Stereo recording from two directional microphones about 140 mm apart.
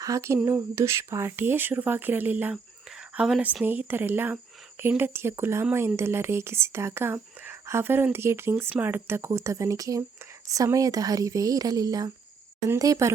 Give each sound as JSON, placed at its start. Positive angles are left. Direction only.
{"t": 0.0, "sound": "speech", "side_deg": -20}